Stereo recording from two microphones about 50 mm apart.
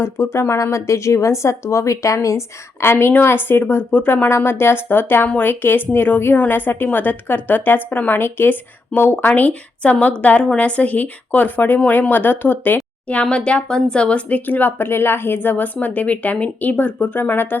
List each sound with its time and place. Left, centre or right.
0.0 s speech: left
2.8 s a woman's voice: left
9.1 s a woman's voice: left
13.3 s a woman's voice: left